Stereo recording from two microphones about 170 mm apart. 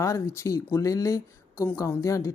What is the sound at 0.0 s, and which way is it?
A woman's voice, 15° left (ahead or behind).